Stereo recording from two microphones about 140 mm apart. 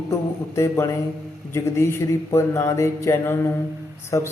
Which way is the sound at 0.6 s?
20° left (ahead or behind).